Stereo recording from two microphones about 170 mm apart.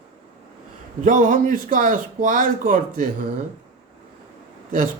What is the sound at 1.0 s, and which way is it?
Speech, 50° right (ahead or behind).